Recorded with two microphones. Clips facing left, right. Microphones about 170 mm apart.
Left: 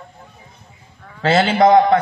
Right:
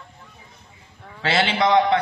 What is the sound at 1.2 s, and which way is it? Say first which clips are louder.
Speech: left 7 dB; 40° left (ahead or behind).